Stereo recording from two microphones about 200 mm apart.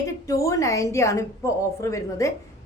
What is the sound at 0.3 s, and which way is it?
A woman's voice, 15° left (ahead or behind).